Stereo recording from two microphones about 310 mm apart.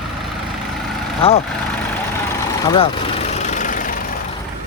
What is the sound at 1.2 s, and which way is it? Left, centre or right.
Speech, centre.